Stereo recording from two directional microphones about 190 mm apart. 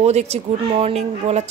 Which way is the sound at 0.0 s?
35° right (ahead or behind).